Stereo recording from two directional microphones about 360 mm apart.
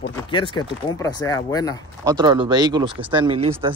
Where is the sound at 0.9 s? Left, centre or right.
Centre.